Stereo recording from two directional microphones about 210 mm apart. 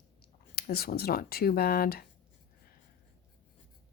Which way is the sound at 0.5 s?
45° left (ahead or behind).